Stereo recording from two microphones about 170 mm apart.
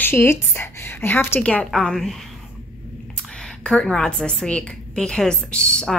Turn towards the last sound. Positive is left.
turn(degrees=5)  # may be behind; listen again after turning